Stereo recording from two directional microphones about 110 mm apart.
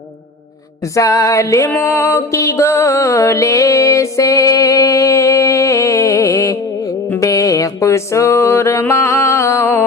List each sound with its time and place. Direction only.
0.9 s music: 30° left (ahead or behind)